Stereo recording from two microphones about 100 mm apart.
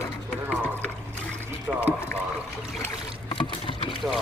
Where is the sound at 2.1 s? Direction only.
20° left (ahead or behind).